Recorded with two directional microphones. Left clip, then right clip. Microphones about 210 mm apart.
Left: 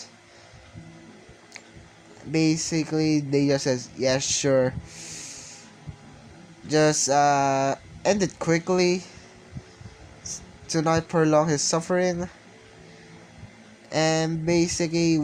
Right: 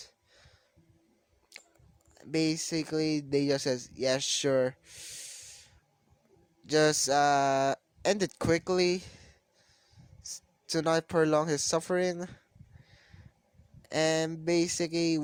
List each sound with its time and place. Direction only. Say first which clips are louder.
2.3 s speech: left 6 dB; 35° right (ahead or behind)
6.7 s speech: left 5 dB; 35° right (ahead or behind)
10.3 s a sound: left 7 dB; 60° right (ahead or behind)
10.7 s speech: left 5 dB; 35° right (ahead or behind)
13.9 s speech: left 5 dB; 35° right (ahead or behind)